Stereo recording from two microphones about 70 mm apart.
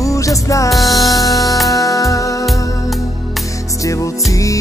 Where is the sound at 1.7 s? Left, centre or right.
Left.